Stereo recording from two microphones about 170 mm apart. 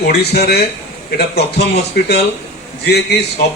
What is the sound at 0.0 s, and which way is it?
Speech, 70° left (ahead or behind).